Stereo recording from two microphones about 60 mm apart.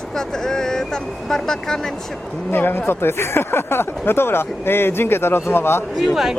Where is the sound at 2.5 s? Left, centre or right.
Left.